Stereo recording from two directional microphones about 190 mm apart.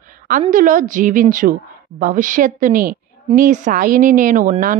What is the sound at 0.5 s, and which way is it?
A woman's voice, 45° right (ahead or behind).